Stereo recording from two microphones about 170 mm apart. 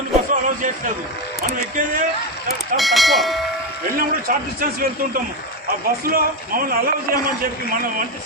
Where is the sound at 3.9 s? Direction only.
55° right (ahead or behind).